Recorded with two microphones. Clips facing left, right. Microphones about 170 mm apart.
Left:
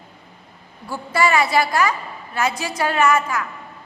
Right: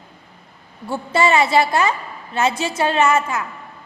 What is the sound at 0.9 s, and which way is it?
A woman's voice, 25° right (ahead or behind).